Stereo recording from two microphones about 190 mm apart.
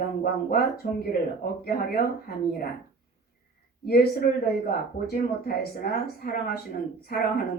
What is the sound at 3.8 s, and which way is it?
Speech, 55° left (ahead or behind).